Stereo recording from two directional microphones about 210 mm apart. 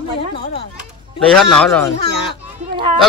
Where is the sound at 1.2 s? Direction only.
Centre (ahead or behind).